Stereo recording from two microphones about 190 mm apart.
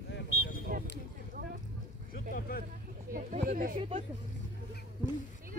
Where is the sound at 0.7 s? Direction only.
45° right (ahead or behind).